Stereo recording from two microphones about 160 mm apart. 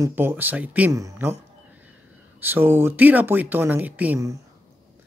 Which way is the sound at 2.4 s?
15° right (ahead or behind).